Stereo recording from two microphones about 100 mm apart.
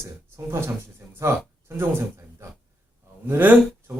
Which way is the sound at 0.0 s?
30° right (ahead or behind).